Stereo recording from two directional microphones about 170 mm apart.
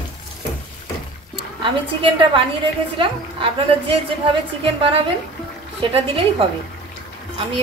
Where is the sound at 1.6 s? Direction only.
30° right (ahead or behind).